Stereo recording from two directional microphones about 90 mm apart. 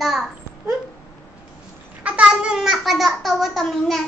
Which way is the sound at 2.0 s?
10° right (ahead or behind).